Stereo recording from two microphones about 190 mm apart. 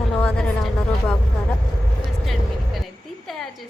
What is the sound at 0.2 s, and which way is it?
Music, 5° left (ahead or behind).